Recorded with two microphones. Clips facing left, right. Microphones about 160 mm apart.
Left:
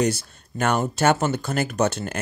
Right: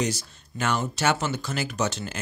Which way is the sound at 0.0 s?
55° left (ahead or behind).